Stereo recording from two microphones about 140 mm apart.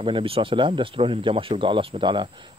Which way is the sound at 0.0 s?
40° right (ahead or behind).